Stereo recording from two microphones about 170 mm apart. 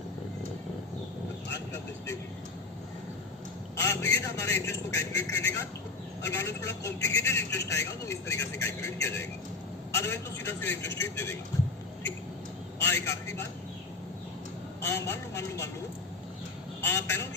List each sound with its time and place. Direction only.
3.8 s a man's voice: 15° left (ahead or behind)
12.8 s vehicle: 15° left (ahead or behind)
14.8 s vehicle: 15° left (ahead or behind)
16.8 s vehicle: 15° left (ahead or behind)